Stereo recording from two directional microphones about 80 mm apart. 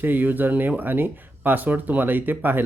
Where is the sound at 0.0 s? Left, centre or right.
Right.